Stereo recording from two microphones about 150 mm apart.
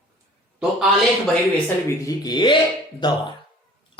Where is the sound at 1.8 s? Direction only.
25° left (ahead or behind).